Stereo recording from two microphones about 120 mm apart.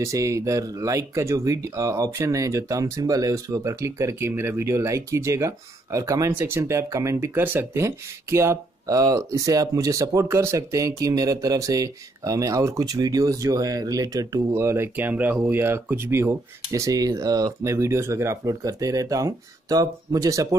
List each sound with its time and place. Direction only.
0.0 s speech: 25° right (ahead or behind)